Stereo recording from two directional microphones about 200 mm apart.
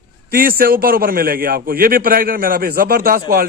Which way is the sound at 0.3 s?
45° right (ahead or behind).